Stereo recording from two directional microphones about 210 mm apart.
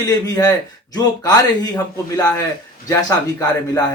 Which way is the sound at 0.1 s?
15° left (ahead or behind).